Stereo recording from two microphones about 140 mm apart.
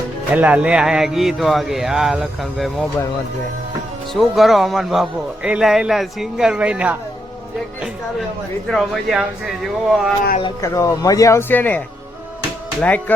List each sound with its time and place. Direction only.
0.3 s a man's voice: 10° right (ahead or behind)
4.1 s a man's voice: centre (ahead or behind)
8.6 s a man's voice: centre (ahead or behind)
10.6 s speech: 20° left (ahead or behind)
12.8 s speech: 10° left (ahead or behind)